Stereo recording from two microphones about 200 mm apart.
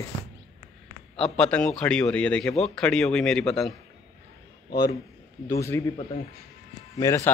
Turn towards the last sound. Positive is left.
turn(degrees=15)  # may be behind; listen again after turning